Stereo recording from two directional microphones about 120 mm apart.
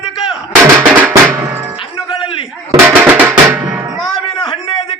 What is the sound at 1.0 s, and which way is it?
Drum, 15° right (ahead or behind).